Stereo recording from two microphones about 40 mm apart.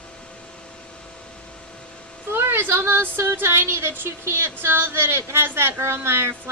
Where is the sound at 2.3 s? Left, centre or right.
Right.